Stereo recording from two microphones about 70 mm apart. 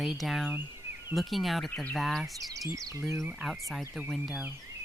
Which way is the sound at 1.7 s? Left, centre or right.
Centre.